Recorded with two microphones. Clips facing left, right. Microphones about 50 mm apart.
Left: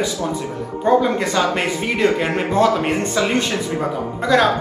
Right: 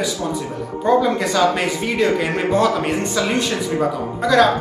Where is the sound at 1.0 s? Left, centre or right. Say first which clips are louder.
Right 1 dB; left.